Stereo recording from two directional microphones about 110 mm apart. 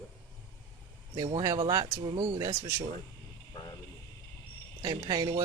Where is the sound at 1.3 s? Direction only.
40° right (ahead or behind).